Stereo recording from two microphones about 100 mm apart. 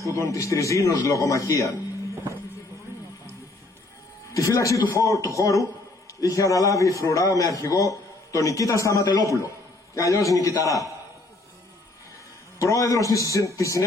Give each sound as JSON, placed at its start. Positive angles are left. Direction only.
{"t": 0.1, "sound": "a man's voice", "side_deg": 30}
{"t": 4.3, "sound": "a man's voice", "side_deg": 35}
{"t": 12.5, "sound": "a man's voice", "side_deg": 35}